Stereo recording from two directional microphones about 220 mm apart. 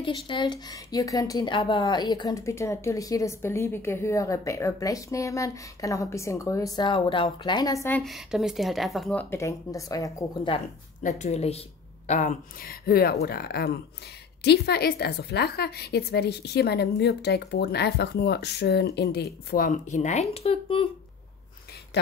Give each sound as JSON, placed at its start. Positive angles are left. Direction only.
{"t": 0.0, "sound": "speech", "side_deg": 20}
{"t": 8.0, "sound": "speech", "side_deg": 0}
{"t": 11.0, "sound": "a woman's voice", "side_deg": 35}